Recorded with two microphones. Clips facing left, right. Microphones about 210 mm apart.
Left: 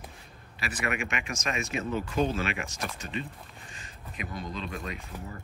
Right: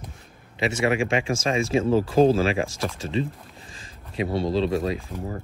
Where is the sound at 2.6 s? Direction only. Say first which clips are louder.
Right 9 dB; 90° right.